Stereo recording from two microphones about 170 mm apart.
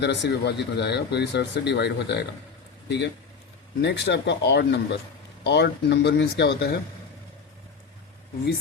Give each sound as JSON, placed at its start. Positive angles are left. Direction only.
{"t": 0.0, "sound": "speech", "side_deg": 90}
{"t": 3.8, "sound": "speech", "side_deg": 85}